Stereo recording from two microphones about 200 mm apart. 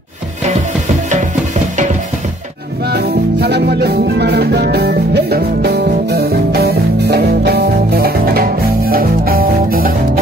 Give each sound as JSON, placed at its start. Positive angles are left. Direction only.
{"t": 2.9, "sound": "music", "side_deg": -55}